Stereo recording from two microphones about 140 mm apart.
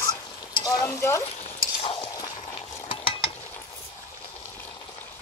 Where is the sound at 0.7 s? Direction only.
20° left (ahead or behind).